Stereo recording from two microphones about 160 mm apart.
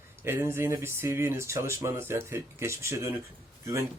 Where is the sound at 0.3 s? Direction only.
15° right (ahead or behind).